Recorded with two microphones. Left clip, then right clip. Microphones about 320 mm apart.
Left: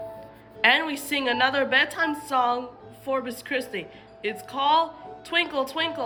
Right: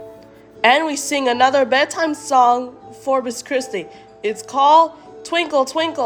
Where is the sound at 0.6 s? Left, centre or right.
Centre.